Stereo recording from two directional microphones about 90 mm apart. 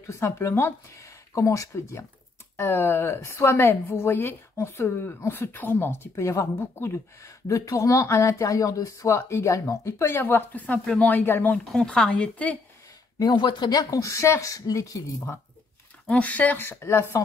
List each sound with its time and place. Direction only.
0.0 s a woman's voice: 35° left (ahead or behind)
11.5 s speech: 10° left (ahead or behind)
13.2 s speech: 60° left (ahead or behind); by 15.3 s 35° left (ahead or behind)
16.1 s a woman's voice: 15° left (ahead or behind)